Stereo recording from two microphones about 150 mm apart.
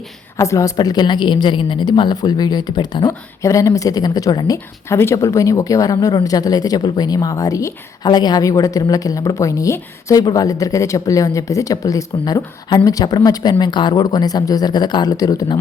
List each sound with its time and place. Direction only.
0.3 s a woman's voice: 20° left (ahead or behind)